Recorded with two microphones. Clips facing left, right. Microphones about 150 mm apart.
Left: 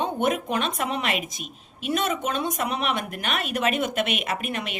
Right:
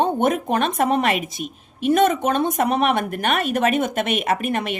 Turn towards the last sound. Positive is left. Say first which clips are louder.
# right 7 dB
turn(degrees=-50)  # may be behind; listen again after turning